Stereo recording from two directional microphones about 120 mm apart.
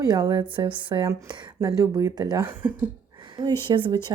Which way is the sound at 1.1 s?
30° right (ahead or behind).